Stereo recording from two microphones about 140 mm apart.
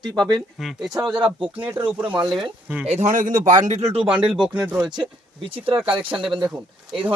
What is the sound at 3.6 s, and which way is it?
Speech, 55° right (ahead or behind).